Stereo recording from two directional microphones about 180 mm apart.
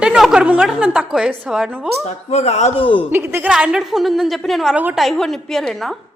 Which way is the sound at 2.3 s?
40° left (ahead or behind).